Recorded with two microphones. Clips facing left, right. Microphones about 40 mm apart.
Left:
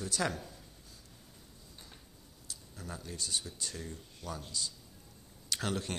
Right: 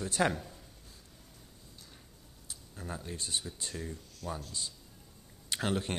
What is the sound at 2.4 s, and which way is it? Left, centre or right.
A man's voice, right.